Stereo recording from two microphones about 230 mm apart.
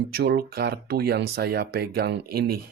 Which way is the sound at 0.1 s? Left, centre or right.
Right.